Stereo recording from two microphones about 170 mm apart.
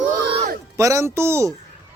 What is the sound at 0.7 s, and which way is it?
Speech, 15° right (ahead or behind).